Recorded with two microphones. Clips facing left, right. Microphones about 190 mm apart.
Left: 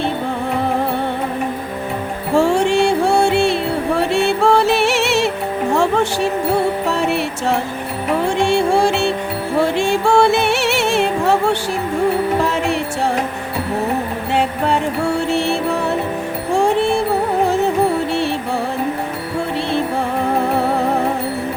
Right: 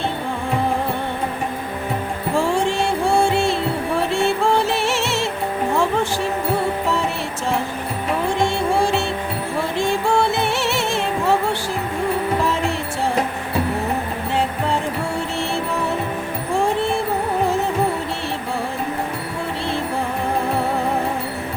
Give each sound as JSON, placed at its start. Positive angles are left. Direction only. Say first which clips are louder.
{"t": 2.3, "sound": "music", "louder": "left 6 dB", "side_deg": 70}
{"t": 6.9, "sound": "music", "louder": "left 4 dB", "side_deg": 70}
{"t": 15.3, "sound": "music", "louder": "left 7 dB", "side_deg": 70}